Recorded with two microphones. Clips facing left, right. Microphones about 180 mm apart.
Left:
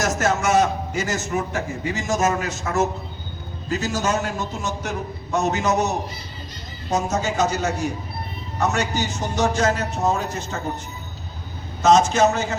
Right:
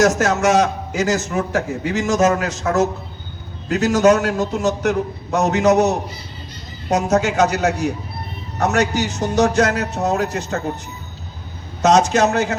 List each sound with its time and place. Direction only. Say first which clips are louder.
0.0 s a man's voice: right 6 dB; 70° right (ahead or behind)
11.8 s a man's voice: right 2 dB; 70° right (ahead or behind)